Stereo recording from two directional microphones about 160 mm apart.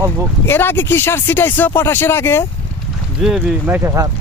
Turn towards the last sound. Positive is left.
turn(degrees=-20)  # may be behind; listen again after turning